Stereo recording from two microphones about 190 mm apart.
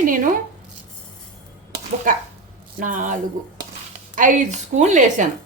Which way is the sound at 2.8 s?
40° right (ahead or behind).